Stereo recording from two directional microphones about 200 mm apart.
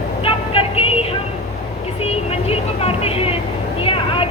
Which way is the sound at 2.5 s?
30° left (ahead or behind).